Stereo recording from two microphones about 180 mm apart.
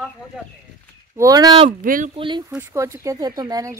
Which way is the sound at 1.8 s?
50° right (ahead or behind).